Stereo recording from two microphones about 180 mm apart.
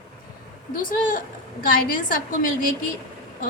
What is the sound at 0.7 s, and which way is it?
A woman's voice, 50° left (ahead or behind).